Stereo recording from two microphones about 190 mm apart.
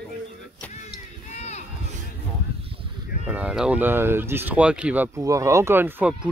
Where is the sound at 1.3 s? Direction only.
35° left (ahead or behind).